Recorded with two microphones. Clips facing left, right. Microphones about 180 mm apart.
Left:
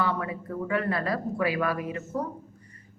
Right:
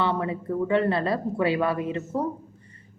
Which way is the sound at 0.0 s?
25° right (ahead or behind).